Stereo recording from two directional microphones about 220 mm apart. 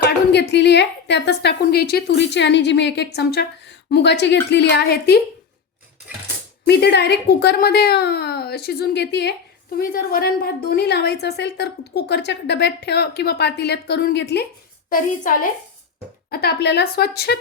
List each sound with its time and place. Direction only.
0.0 s a woman's voice: 50° left (ahead or behind)
6.7 s a woman's voice: 50° left (ahead or behind)
14.8 s a woman's voice: 40° left (ahead or behind)